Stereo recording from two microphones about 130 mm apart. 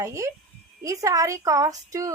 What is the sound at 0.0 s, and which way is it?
A woman's voice, 25° right (ahead or behind).